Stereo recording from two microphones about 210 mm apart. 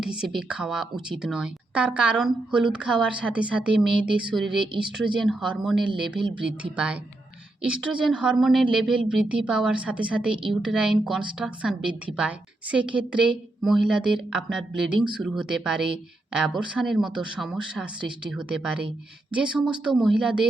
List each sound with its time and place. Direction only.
0.0 s speech: 5° right (ahead or behind)
4.6 s speech: 25° right (ahead or behind)
5.2 s speech: 5° right (ahead or behind)
5.9 s speech: 25° right (ahead or behind)
7.7 s speech: 5° right (ahead or behind)